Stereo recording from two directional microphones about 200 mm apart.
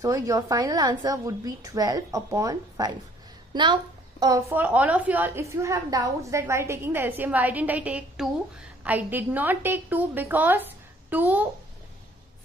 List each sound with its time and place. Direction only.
0.0 s a woman's voice: 15° right (ahead or behind)